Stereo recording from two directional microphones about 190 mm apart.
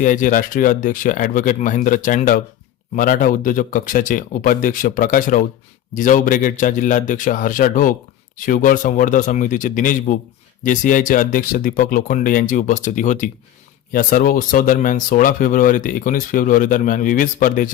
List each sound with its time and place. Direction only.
0.0 s speech: 45° left (ahead or behind)